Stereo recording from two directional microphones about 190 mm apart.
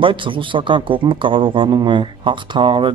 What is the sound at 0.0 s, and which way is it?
A man's voice, 25° right (ahead or behind).